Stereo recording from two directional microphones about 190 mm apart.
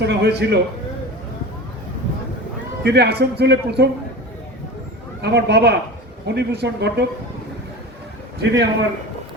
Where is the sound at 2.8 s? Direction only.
60° right (ahead or behind).